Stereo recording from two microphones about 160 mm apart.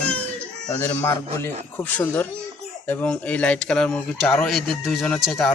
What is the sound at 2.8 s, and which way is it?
Speech, 10° left (ahead or behind).